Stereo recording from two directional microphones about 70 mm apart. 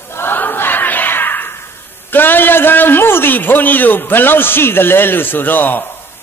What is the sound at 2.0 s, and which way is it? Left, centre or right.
A man's voice, left.